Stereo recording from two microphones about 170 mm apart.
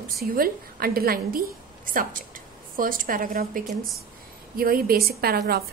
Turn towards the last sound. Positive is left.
turn(degrees=-65)  # may be behind; listen again after turning